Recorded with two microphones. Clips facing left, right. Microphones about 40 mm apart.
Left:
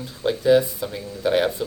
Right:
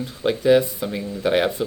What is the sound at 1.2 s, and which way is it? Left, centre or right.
Speech, right.